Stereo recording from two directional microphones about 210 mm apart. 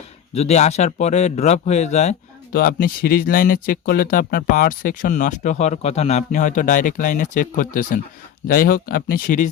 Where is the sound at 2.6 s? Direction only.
45° left (ahead or behind).